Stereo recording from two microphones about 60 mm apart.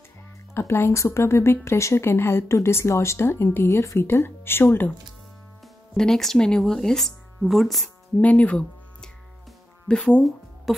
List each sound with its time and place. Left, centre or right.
0.6 s speech: left
3.7 s speech: left
4.0 s speech: left
5.9 s speech: centre
8.2 s speech: left
9.8 s speech: centre
10.2 s music: centre